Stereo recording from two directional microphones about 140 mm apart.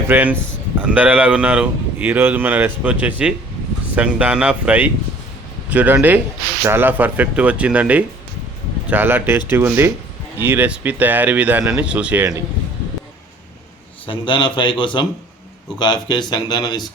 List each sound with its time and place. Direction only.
0.1 s a man's voice: 10° right (ahead or behind)
14.1 s speech: 35° left (ahead or behind)